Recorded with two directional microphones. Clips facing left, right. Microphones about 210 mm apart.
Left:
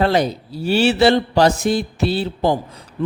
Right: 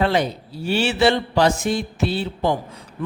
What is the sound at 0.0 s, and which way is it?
A man's voice, 40° left (ahead or behind).